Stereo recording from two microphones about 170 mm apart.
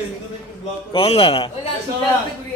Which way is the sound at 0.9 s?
35° left (ahead or behind).